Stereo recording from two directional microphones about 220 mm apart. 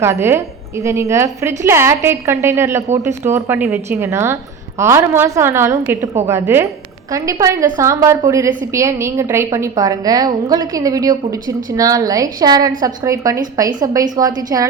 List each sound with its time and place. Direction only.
0.0 s a woman's voice: 10° right (ahead or behind)